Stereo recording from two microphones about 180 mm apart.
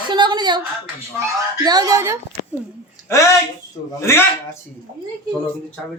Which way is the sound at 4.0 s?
15° left (ahead or behind).